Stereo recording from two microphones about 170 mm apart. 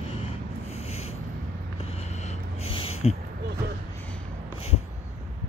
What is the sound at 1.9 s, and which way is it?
Vehicle, 40° left (ahead or behind).